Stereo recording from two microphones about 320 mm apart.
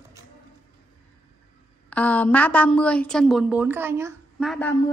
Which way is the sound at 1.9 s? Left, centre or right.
Centre.